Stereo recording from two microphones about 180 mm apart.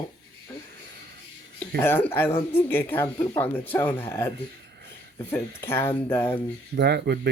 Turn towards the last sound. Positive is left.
turn(degrees=-65)  # may be behind; listen again after turning